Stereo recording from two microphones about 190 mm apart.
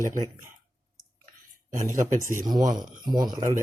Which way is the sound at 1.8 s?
45° right (ahead or behind).